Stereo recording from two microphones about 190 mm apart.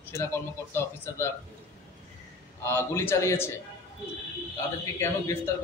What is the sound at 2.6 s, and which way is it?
Speech, 15° left (ahead or behind).